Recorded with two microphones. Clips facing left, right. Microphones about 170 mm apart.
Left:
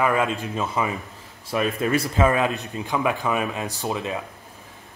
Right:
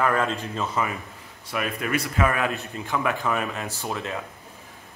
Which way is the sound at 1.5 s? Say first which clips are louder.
Left 5 dB; 30° left (ahead or behind).